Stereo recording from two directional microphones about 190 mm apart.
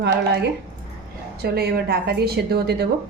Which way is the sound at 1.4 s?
55° right (ahead or behind).